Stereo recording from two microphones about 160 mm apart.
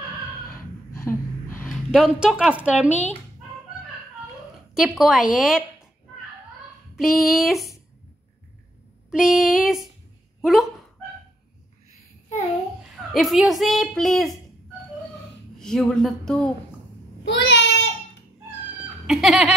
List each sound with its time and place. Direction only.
1.0 s gasp: 15° left (ahead or behind)
1.7 s speech: centre (ahead or behind)
4.7 s speech: centre (ahead or behind)
7.0 s speech: centre (ahead or behind)
9.1 s speech: 5° right (ahead or behind)
12.8 s a woman's voice: centre (ahead or behind)
15.6 s speech: 5° left (ahead or behind)
17.2 s child singing: 90° left
19.0 s laughter: centre (ahead or behind)